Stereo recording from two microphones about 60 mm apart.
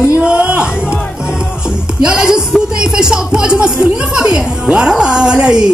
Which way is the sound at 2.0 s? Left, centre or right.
Centre.